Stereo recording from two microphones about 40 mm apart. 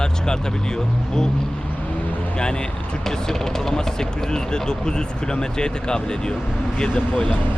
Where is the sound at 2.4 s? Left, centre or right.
Centre.